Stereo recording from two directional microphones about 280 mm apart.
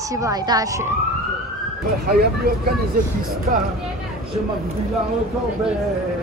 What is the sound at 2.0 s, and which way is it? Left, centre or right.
Speech, right.